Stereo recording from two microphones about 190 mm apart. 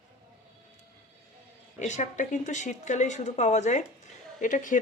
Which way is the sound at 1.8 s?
40° left (ahead or behind).